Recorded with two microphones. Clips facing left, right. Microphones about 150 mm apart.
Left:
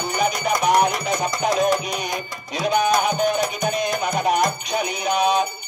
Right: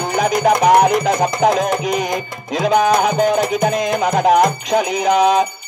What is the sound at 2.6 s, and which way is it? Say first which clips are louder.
Music: right 5 dB; 90° right.